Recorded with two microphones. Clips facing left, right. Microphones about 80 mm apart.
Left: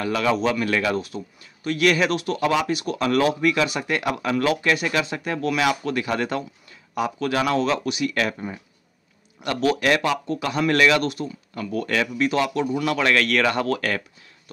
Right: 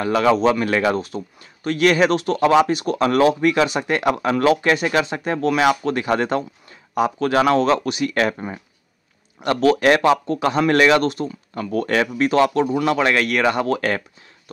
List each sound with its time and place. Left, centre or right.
0.0 s speech: right
12.9 s speech: right